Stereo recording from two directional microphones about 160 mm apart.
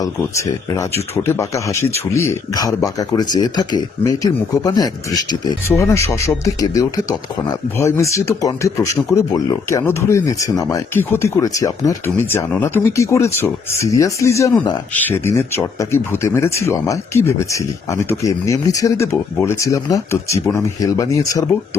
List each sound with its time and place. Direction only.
0.0 s speech: 20° left (ahead or behind)